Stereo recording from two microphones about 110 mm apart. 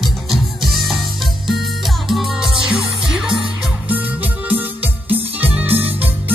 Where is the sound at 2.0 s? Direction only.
5° right (ahead or behind).